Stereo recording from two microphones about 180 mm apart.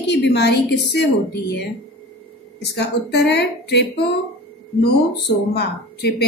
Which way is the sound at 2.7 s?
65° left (ahead or behind).